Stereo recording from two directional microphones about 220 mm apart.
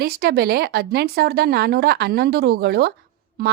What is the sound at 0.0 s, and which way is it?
A woman's voice, 45° right (ahead or behind).